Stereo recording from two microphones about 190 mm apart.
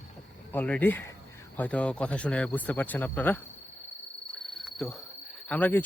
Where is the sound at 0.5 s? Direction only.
10° left (ahead or behind).